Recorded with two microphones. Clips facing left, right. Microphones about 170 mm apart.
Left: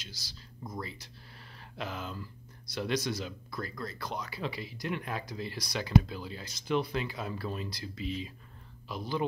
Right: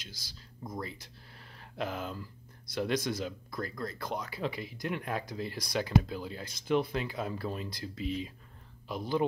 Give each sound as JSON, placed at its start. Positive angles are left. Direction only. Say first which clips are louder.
{"t": 0.0, "sound": "speech", "louder": "left 1 dB", "side_deg": -50}